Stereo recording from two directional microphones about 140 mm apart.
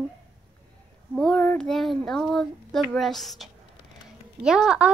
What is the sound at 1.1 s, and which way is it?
Child singing, 5° left (ahead or behind).